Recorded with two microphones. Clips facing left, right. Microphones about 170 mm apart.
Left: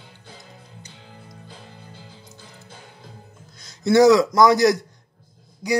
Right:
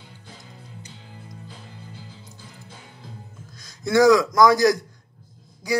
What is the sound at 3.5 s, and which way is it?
A man's voice, 25° left (ahead or behind).